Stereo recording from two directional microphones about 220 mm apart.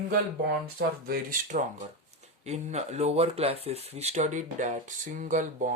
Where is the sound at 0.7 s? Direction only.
40° right (ahead or behind).